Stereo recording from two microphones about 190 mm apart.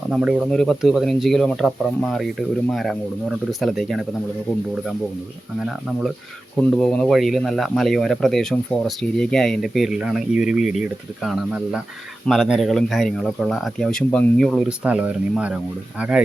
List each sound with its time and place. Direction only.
0.1 s speech: centre (ahead or behind)
5.5 s speech: centre (ahead or behind)